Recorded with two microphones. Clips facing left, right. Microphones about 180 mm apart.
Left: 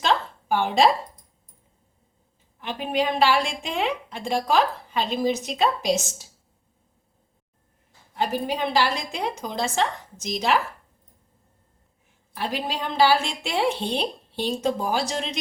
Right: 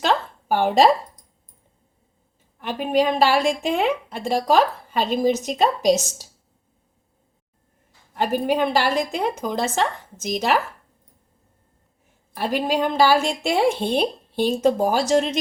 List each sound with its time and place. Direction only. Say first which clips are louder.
0.0 s a sound: right 2 dB; 45° right (ahead or behind)
2.6 s a woman's voice: right 5 dB; 45° right (ahead or behind)
5.9 s a woman's voice: right 5 dB; centre (ahead or behind)
8.1 s a woman's voice: right 5 dB; 50° right (ahead or behind)
12.3 s a woman's voice: right 6 dB; 45° right (ahead or behind)